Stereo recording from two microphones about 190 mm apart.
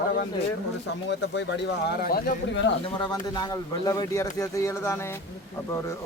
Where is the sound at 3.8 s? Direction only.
20° left (ahead or behind).